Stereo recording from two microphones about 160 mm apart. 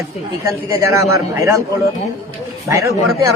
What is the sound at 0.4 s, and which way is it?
A man's voice, 20° right (ahead or behind).